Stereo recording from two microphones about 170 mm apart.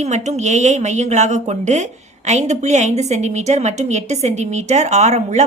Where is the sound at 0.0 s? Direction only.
45° right (ahead or behind).